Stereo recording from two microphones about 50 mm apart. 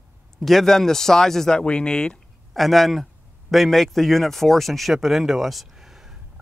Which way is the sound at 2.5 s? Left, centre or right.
Centre.